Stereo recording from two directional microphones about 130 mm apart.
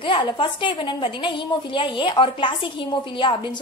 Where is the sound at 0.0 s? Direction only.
40° left (ahead or behind).